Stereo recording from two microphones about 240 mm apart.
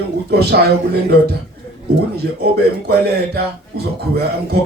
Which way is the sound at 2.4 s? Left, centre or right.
Right.